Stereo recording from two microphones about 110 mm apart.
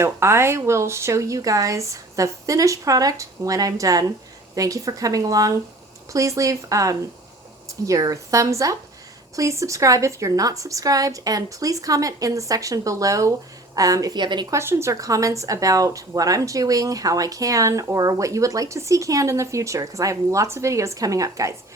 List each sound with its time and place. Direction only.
0.0 s speech: 25° right (ahead or behind); by 14.4 s 40° right (ahead or behind)
14.5 s speech: 25° right (ahead or behind)